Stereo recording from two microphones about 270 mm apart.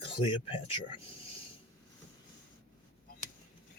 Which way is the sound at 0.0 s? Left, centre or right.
Centre.